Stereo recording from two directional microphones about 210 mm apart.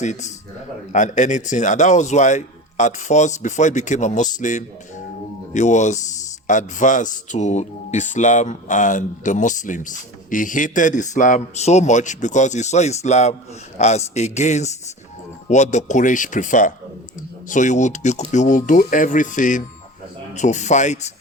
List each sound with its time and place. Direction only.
0.0 s speech: 35° left (ahead or behind)